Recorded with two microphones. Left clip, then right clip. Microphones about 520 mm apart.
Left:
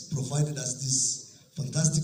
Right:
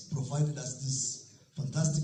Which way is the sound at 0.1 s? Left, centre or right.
Centre.